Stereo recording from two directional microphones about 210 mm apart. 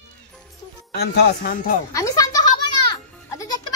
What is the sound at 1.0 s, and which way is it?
Speech, 45° left (ahead or behind).